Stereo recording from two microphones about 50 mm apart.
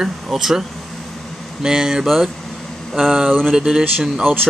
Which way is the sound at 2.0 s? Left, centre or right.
Centre.